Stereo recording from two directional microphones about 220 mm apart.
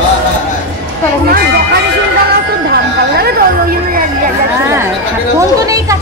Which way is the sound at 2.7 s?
45° right (ahead or behind).